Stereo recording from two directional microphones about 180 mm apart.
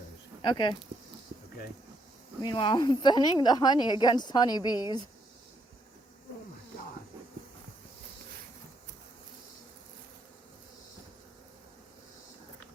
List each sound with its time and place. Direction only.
0.4 s a woman's voice: 25° left (ahead or behind)
2.5 s a woman's voice: 25° left (ahead or behind)